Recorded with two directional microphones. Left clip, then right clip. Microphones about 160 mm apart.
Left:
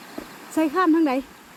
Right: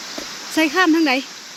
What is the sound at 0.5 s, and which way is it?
Speech, 5° right (ahead or behind).